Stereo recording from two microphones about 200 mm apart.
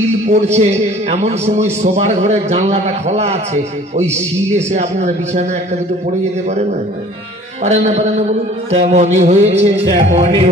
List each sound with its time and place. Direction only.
0.3 s a man's voice: 35° right (ahead or behind)
7.6 s a man's voice: 35° right (ahead or behind)